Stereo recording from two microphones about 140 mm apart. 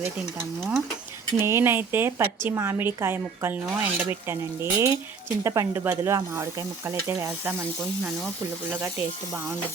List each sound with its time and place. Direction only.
1.3 s a woman's voice: 20° right (ahead or behind)
8.7 s speech: 20° right (ahead or behind)